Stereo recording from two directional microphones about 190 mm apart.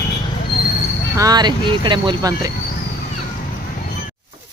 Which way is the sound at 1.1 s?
20° right (ahead or behind).